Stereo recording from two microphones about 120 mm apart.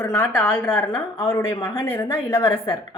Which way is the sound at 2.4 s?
45° left (ahead or behind).